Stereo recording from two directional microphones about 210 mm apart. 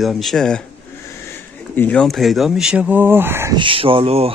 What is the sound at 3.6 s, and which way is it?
Speech, 25° right (ahead or behind).